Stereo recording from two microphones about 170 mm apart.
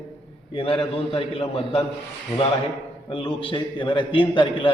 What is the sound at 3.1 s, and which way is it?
A man's voice, 30° left (ahead or behind).